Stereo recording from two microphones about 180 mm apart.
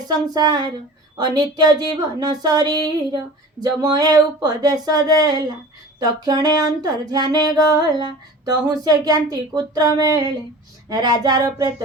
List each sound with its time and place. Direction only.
0.3 s speech: 25° right (ahead or behind)